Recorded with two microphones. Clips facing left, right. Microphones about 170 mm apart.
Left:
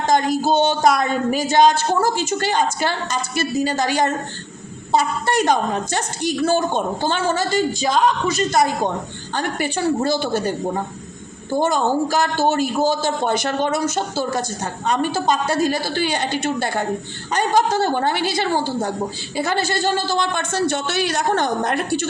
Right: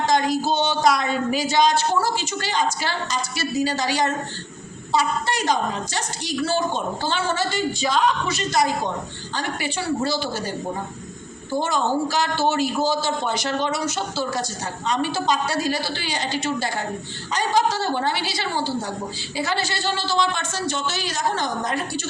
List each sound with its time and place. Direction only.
0.1 s speech: 50° left (ahead or behind)
11.6 s a woman's voice: 50° left (ahead or behind)